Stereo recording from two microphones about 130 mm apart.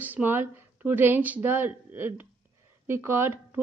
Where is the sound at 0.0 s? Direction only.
15° right (ahead or behind).